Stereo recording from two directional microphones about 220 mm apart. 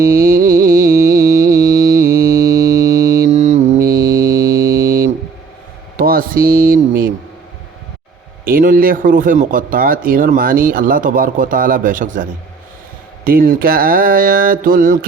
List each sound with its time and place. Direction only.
0.0 s music: 40° right (ahead or behind)
1.6 s music: 15° right (ahead or behind)
1.9 s music: 40° right (ahead or behind)
2.6 s music: 15° right (ahead or behind)
3.2 s mantra: 35° right (ahead or behind)
4.0 s a sound: 15° right (ahead or behind)
6.0 s speech: 40° right (ahead or behind)
8.4 s speech: 40° right (ahead or behind)